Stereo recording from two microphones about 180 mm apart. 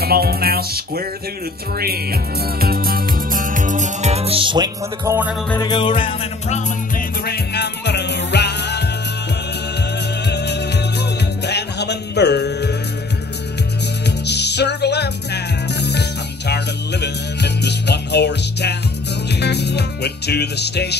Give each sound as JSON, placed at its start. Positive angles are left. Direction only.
{"t": 0.0, "sound": "music", "side_deg": -60}
{"t": 5.6, "sound": "music", "side_deg": 25}
{"t": 7.2, "sound": "music", "side_deg": 65}
{"t": 10.2, "sound": "music", "side_deg": 70}
{"t": 14.0, "sound": "music", "side_deg": 70}